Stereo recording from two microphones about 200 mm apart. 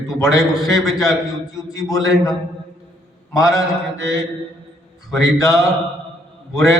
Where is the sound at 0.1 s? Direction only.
15° left (ahead or behind).